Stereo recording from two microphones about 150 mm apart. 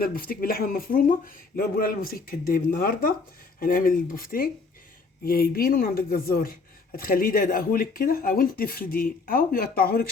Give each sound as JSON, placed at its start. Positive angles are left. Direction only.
{"t": 0.0, "sound": "speech", "side_deg": 75}